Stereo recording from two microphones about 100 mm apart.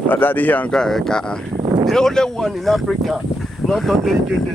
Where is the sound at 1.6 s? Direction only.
45° right (ahead or behind).